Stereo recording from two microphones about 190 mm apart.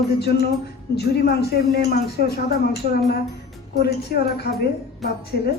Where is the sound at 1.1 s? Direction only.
55° left (ahead or behind).